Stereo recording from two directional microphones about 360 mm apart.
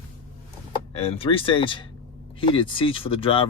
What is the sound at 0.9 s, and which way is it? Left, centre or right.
Speech, centre.